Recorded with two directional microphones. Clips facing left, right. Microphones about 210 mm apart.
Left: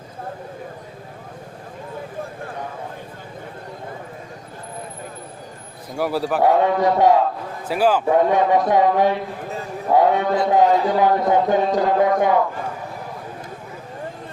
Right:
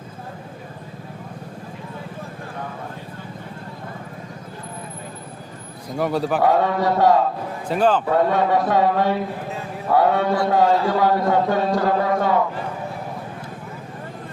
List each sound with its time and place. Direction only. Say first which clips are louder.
6.0 s speech: even; 5° left (ahead or behind)
6.6 s a man's voice: left 2 dB; 15° left (ahead or behind)